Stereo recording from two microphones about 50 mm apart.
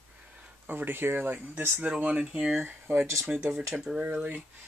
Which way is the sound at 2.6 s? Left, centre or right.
Right.